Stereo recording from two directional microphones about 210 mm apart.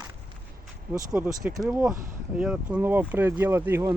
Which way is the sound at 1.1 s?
10° right (ahead or behind).